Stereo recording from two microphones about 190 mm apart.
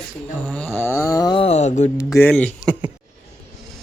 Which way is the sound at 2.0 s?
15° left (ahead or behind).